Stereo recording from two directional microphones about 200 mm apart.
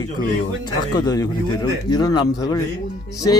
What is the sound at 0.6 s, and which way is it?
Speech, 20° left (ahead or behind).